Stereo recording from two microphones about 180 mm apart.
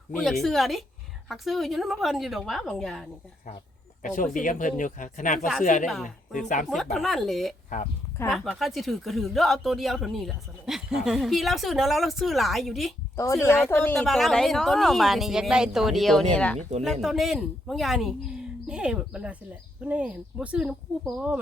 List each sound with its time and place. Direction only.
0.2 s speech: centre (ahead or behind)
4.0 s speech: 45° left (ahead or behind)
5.8 s speech: centre (ahead or behind)
6.3 s speech: 45° left (ahead or behind)
6.9 s speech: centre (ahead or behind)
7.7 s speech: 45° left (ahead or behind)
8.3 s speech: centre (ahead or behind)
13.1 s speech: 15° left (ahead or behind); by 21.4 s 5° right (ahead or behind)